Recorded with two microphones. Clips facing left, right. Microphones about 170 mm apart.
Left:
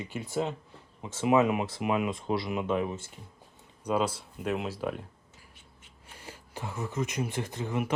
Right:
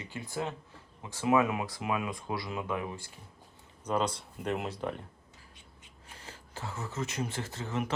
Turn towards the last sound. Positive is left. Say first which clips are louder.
# left 3 dB
turn(degrees=15)  # may be behind; listen again after turning